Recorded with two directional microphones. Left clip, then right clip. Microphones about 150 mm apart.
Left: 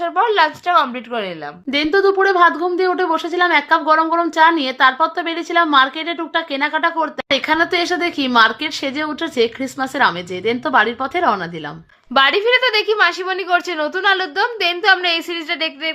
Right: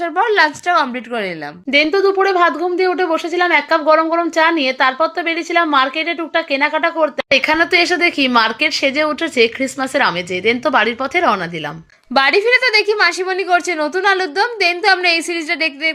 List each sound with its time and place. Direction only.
0.0 s a woman's voice: 20° right (ahead or behind)
1.7 s a woman's voice: 10° right (ahead or behind)